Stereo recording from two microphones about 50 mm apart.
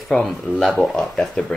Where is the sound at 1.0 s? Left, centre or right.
Centre.